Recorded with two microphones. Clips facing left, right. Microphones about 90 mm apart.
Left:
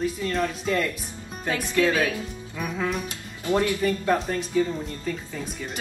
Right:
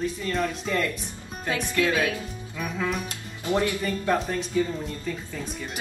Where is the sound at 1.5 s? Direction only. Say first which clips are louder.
Left 2 dB; 10° right (ahead or behind).